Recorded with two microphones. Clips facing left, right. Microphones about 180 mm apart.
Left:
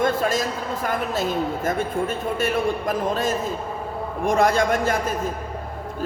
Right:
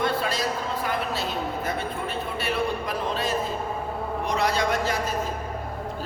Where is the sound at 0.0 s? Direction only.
45° left (ahead or behind).